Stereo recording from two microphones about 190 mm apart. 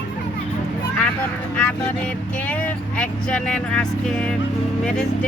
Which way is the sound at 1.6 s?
5° left (ahead or behind).